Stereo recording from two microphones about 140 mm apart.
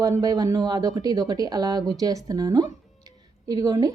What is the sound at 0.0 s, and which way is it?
A woman's voice, 25° right (ahead or behind).